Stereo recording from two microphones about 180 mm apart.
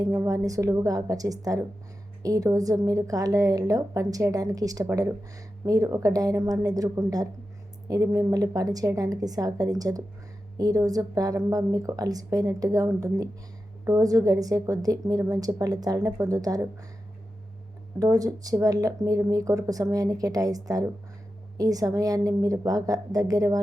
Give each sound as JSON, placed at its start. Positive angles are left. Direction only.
{"t": 0.0, "sound": "a woman's voice", "side_deg": -15}
{"t": 18.0, "sound": "a woman's voice", "side_deg": -20}